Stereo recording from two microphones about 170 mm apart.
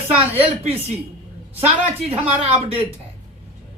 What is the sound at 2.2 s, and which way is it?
Speech, 35° right (ahead or behind).